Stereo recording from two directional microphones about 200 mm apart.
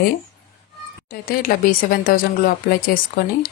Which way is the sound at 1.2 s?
45° left (ahead or behind).